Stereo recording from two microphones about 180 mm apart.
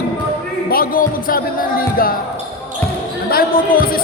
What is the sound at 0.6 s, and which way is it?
Speech, 55° left (ahead or behind).